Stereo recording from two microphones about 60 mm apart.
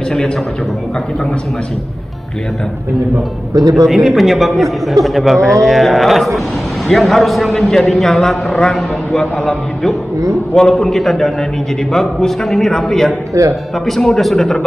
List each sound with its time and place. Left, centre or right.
3.5 s a man's voice: right
3.8 s a man's voice: centre
13.3 s speech: right
13.8 s a man's voice: centre